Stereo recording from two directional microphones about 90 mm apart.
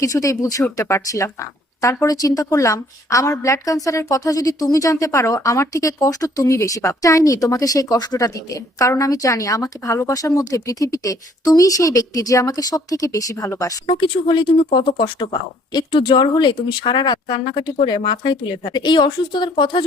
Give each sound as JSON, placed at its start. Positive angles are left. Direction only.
{"t": 0.0, "sound": "a woman's voice", "side_deg": 40}
{"t": 13.8, "sound": "speech", "side_deg": 70}